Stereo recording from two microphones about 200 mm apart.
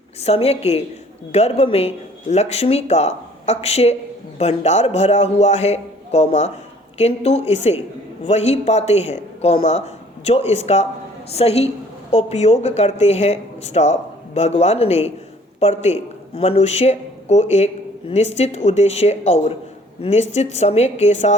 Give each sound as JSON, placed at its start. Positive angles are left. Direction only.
{"t": 0.2, "sound": "speech", "side_deg": 30}